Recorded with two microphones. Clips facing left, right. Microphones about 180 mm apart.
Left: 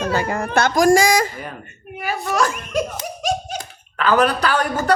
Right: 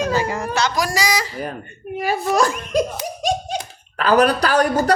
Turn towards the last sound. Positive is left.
turn(degrees=-40)  # may be behind; listen again after turning